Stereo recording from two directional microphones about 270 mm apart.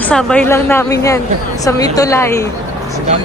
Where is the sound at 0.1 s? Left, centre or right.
Centre.